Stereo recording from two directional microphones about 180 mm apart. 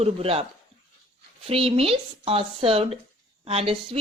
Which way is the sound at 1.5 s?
30° right (ahead or behind).